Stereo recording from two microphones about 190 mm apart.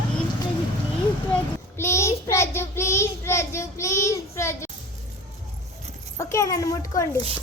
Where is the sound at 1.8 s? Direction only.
15° left (ahead or behind).